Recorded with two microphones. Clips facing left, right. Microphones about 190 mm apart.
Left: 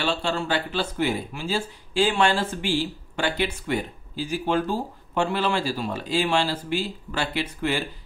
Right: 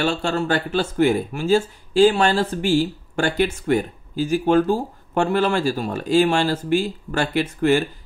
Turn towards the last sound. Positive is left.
turn(degrees=-50)  # may be behind; listen again after turning